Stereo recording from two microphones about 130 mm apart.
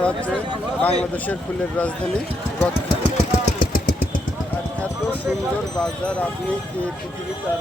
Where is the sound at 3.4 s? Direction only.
90° left.